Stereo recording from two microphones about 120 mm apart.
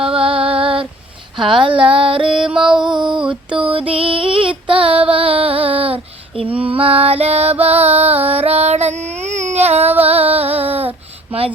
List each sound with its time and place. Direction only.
0.0 s female singing: 50° right (ahead or behind)
1.4 s a sound: 45° right (ahead or behind)
2.5 s music: 5° right (ahead or behind)
2.9 s a sound: 40° right (ahead or behind)
3.2 s mantra: 45° right (ahead or behind)
3.9 s female singing: 45° right (ahead or behind)
6.4 s music: 50° right (ahead or behind)
8.3 s female singing: 60° right (ahead or behind)
10.0 s music: 55° right (ahead or behind)